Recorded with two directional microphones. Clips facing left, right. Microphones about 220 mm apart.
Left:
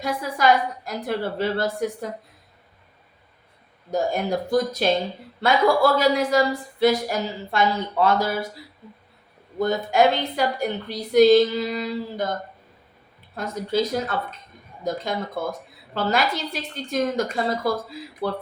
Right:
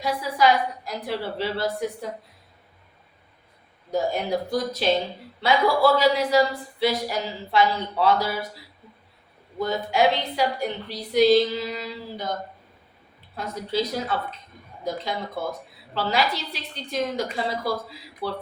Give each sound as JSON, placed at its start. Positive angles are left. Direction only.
{"t": 0.0, "sound": "speech", "side_deg": 50}
{"t": 3.9, "sound": "speech", "side_deg": 45}
{"t": 9.6, "sound": "speech", "side_deg": 50}
{"t": 16.0, "sound": "speech", "side_deg": 50}